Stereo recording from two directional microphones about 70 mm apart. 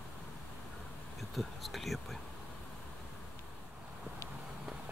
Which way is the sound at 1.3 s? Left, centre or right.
Centre.